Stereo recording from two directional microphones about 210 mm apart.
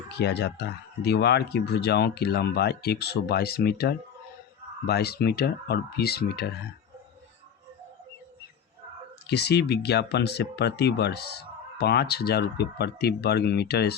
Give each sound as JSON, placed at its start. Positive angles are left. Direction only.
{"t": 0.1, "sound": "speech", "side_deg": 55}
{"t": 9.2, "sound": "speech", "side_deg": 50}